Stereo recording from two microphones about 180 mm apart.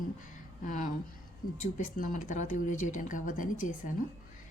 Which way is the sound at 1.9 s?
45° left (ahead or behind).